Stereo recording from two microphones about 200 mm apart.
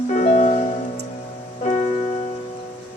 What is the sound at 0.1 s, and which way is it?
Music, 35° left (ahead or behind).